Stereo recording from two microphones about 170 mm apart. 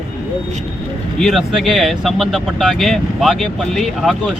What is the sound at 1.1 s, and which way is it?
Speech, centre (ahead or behind).